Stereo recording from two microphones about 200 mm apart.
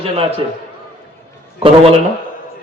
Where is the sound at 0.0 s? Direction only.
30° right (ahead or behind).